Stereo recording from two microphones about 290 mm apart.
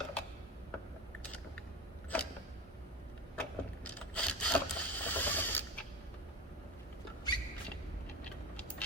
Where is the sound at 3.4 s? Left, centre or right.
Centre.